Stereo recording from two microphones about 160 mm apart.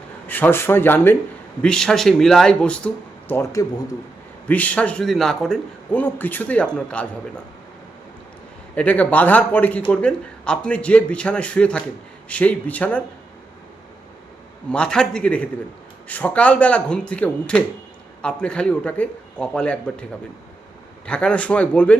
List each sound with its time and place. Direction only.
0.3 s speech: 10° left (ahead or behind)
8.7 s speech: 10° left (ahead or behind)
14.7 s speech: 5° left (ahead or behind)
21.1 s speech: 5° left (ahead or behind)